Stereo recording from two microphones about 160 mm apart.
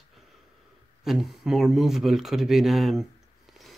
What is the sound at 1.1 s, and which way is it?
Speech, centre (ahead or behind).